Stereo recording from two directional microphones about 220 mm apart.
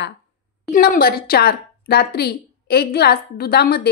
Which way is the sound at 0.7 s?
40° left (ahead or behind).